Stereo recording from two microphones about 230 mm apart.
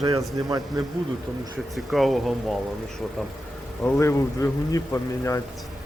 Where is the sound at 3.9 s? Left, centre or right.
Centre.